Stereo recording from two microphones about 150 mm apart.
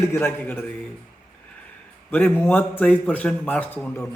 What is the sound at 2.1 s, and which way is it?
A man's voice, 15° left (ahead or behind).